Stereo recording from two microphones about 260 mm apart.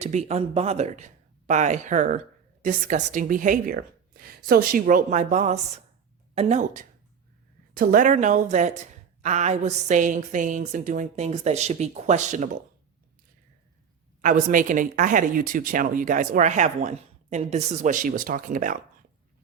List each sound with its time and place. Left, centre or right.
0.0 s a woman's voice: right
14.2 s speech: right